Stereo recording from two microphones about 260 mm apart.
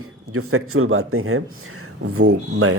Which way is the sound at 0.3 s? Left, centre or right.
Right.